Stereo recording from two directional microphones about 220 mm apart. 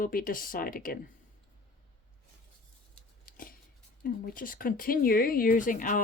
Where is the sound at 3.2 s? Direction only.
40° left (ahead or behind).